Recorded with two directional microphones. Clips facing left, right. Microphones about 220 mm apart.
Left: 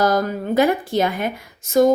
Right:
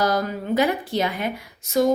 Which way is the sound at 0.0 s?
45° left (ahead or behind).